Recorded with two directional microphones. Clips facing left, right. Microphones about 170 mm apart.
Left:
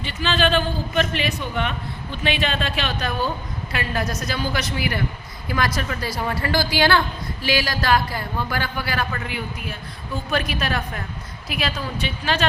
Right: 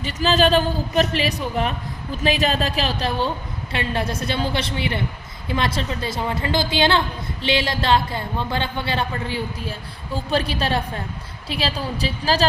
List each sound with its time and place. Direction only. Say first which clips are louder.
0.0 s a man's voice: right 4 dB; 40° right (ahead or behind)